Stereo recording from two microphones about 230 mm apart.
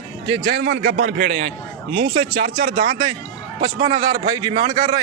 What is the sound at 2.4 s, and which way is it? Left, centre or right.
Speech, right.